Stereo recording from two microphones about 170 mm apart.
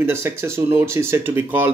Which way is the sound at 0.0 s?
15° right (ahead or behind).